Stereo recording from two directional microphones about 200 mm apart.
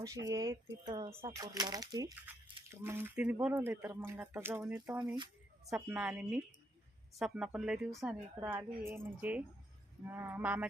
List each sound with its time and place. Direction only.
0.0 s a woman's voice: 15° right (ahead or behind)